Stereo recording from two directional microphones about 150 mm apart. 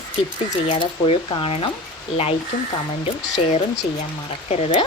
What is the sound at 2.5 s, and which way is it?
Speech, 60° left (ahead or behind).